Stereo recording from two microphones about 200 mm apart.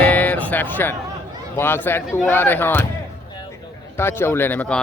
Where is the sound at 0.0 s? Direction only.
10° left (ahead or behind).